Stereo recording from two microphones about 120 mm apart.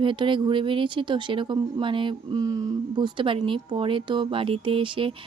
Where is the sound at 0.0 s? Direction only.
45° right (ahead or behind).